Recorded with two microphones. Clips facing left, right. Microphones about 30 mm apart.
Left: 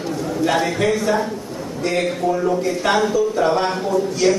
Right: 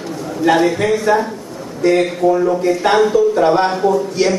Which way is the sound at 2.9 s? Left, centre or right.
Right.